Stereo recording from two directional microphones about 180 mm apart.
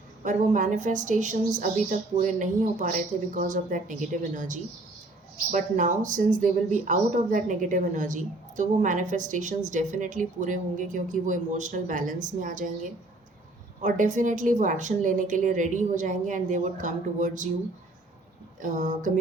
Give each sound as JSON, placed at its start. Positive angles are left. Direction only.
{"t": 0.3, "sound": "a woman's voice", "side_deg": -45}
{"t": 13.8, "sound": "a woman's voice", "side_deg": -45}
{"t": 18.6, "sound": "a woman's voice", "side_deg": -45}